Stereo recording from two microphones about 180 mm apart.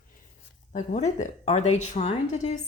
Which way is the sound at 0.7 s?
40° left (ahead or behind).